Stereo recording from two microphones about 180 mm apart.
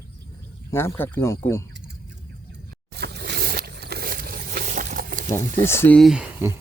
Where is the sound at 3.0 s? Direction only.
65° right (ahead or behind); by 5.3 s 50° right (ahead or behind).